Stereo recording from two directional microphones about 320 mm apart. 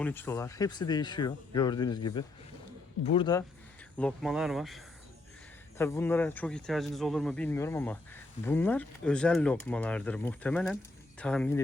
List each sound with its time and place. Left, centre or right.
0.0 s speech: centre
3.9 s speech: centre